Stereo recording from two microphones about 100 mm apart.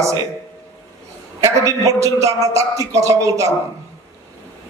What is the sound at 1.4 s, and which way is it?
Music, 35° right (ahead or behind).